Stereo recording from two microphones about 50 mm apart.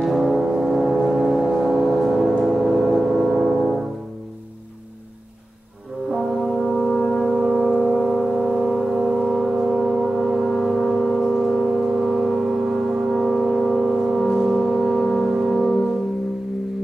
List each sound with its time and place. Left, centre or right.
0.0 s music: centre
6.1 s brass instrument: centre